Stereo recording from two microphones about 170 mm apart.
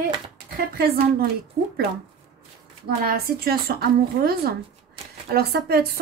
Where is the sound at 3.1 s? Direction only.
65° right (ahead or behind).